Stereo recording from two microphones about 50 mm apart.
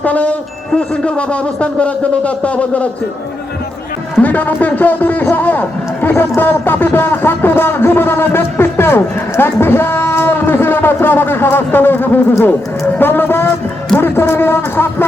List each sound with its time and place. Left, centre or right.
0.0 s speech: left
4.2 s a man's voice: left